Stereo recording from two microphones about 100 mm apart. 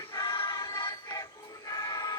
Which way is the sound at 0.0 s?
50° left (ahead or behind).